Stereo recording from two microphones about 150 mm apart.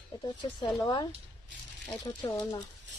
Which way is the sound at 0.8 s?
30° left (ahead or behind).